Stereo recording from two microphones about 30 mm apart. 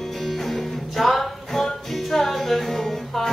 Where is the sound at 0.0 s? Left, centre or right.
Centre.